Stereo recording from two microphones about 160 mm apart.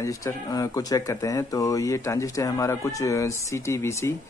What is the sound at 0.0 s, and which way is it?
Speech, 20° left (ahead or behind).